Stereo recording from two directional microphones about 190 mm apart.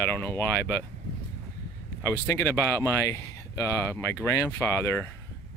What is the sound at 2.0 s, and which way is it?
Speech, 15° left (ahead or behind).